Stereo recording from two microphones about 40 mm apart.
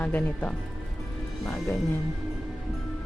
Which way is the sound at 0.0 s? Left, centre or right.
Left.